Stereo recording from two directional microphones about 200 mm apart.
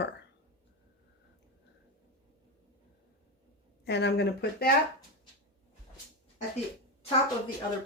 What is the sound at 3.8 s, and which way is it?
Speech, 60° left (ahead or behind).